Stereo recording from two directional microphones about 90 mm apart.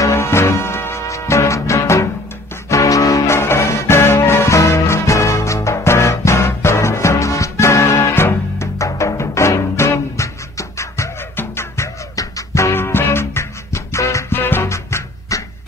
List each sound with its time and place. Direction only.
0.0 s music: 30° left (ahead or behind)